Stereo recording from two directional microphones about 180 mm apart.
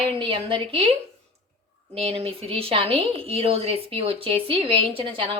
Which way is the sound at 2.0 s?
35° right (ahead or behind).